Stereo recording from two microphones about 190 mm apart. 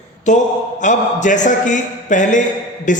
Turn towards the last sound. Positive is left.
turn(degrees=40)  # may be behind; listen again after turning